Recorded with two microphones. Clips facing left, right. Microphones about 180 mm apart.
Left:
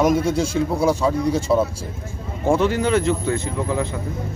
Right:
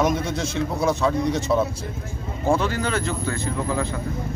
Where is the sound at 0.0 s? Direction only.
10° left (ahead or behind).